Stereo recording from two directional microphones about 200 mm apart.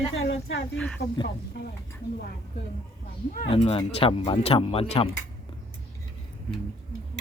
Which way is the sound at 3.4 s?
30° left (ahead or behind).